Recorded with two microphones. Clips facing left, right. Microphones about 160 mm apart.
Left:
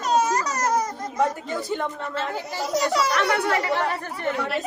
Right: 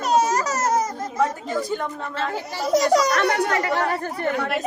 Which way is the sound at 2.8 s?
35° right (ahead or behind).